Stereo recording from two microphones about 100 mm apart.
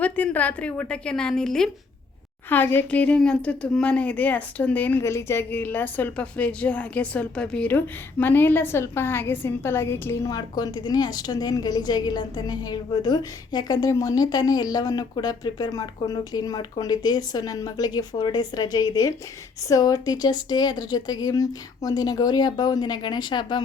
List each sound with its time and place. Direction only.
0.0 s speech: 15° left (ahead or behind)
2.5 s speech: 20° left (ahead or behind)
5.0 s a woman's voice: 25° left (ahead or behind)
10.2 s speech: 40° left (ahead or behind)